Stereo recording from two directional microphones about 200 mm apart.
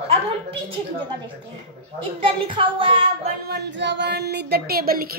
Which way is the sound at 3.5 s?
55° right (ahead or behind).